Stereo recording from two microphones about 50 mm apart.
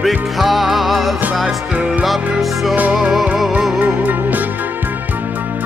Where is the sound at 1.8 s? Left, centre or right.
Centre.